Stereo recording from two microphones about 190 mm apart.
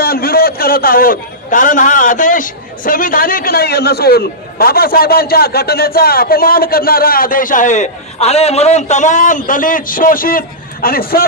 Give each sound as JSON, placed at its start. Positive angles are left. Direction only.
{"t": 0.0, "sound": "a man's voice", "side_deg": 50}